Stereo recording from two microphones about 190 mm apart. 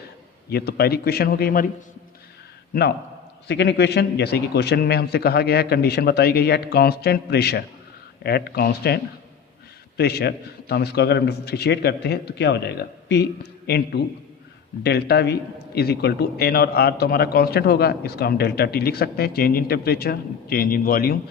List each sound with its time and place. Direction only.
0.5 s a man's voice: 55° left (ahead or behind)
3.4 s a man's voice: 65° left (ahead or behind)
10.0 s a man's voice: 60° left (ahead or behind)